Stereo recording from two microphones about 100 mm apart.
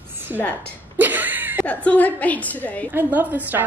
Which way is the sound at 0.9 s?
20° right (ahead or behind).